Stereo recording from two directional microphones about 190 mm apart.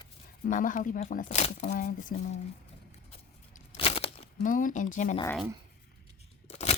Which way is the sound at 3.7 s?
30° left (ahead or behind).